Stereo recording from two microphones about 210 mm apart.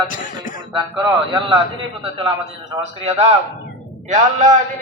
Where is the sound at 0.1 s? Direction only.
40° left (ahead or behind).